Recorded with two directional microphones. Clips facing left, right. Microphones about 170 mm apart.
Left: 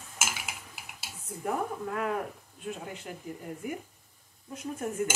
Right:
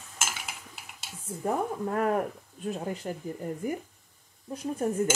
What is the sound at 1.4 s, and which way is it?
Speech, 40° right (ahead or behind).